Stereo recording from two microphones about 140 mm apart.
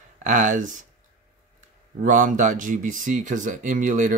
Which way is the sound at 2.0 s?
70° right (ahead or behind).